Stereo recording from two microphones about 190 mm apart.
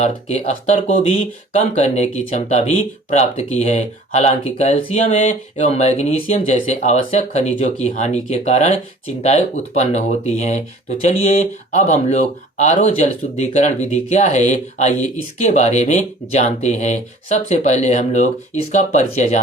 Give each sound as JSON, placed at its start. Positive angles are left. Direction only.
{"t": 0.0, "sound": "speech", "side_deg": 35}